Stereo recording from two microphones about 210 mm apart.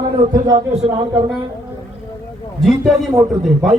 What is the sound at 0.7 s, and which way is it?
Speech, 25° right (ahead or behind).